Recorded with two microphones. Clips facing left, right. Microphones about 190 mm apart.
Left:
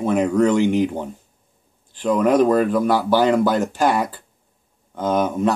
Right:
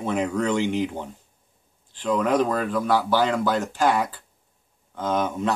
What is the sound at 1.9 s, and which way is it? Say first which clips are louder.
Speech: left 5 dB; 15° left (ahead or behind).